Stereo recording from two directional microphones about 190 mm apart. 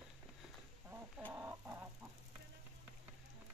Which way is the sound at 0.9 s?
10° right (ahead or behind).